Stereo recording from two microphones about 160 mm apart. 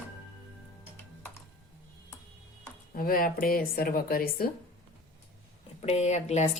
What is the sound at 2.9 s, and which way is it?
Speech, 60° left (ahead or behind).